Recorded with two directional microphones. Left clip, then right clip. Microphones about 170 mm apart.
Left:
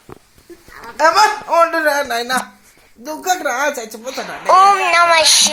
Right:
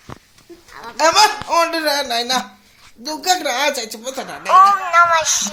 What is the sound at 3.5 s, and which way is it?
Speech, centre (ahead or behind).